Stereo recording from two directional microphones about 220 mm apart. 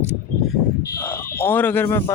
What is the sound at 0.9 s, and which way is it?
Speech, 10° left (ahead or behind).